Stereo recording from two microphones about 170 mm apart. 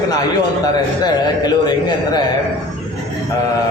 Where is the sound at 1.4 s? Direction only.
25° left (ahead or behind).